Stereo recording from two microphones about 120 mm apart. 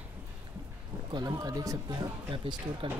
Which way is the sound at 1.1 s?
30° right (ahead or behind).